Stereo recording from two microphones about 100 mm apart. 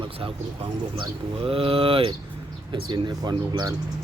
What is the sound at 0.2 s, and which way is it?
Speech, 65° right (ahead or behind).